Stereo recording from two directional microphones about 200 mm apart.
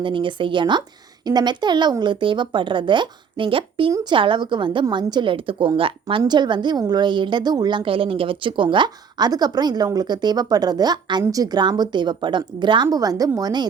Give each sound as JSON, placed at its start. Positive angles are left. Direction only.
{"t": 0.0, "sound": "a woman's voice", "side_deg": -25}